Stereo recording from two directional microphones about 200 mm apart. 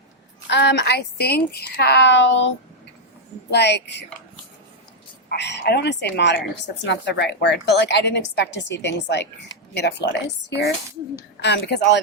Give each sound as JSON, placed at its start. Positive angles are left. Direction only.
{"t": 0.4, "sound": "a woman's voice", "side_deg": 60}
{"t": 3.5, "sound": "a woman's voice", "side_deg": 55}
{"t": 5.3, "sound": "a woman's voice", "side_deg": 55}